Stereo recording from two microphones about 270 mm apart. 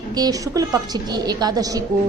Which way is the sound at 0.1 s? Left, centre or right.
Centre.